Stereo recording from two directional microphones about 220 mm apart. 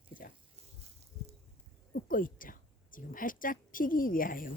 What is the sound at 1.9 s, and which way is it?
A woman's voice, 40° left (ahead or behind).